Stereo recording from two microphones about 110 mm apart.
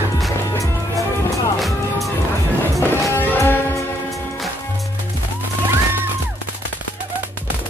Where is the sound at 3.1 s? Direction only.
20° left (ahead or behind).